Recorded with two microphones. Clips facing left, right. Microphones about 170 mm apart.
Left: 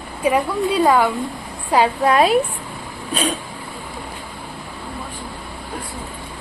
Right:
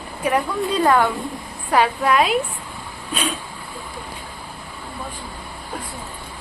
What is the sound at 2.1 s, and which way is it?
Speech, 35° left (ahead or behind).